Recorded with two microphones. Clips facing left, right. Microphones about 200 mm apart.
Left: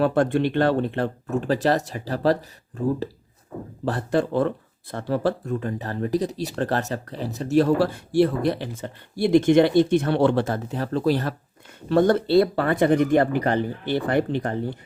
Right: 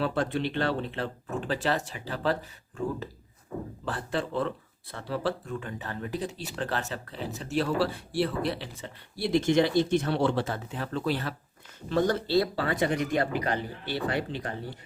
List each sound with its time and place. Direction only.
0.0 s speech: 50° left (ahead or behind)
11.9 s speech: 60° left (ahead or behind)